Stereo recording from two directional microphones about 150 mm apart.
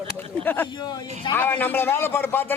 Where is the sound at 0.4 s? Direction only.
15° left (ahead or behind).